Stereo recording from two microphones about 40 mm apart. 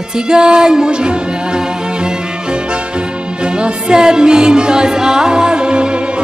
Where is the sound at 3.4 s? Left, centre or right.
Right.